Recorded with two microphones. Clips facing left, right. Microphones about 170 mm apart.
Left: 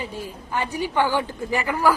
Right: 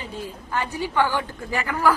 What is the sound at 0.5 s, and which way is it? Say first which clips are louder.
A woman's voice: even; 15° left (ahead or behind).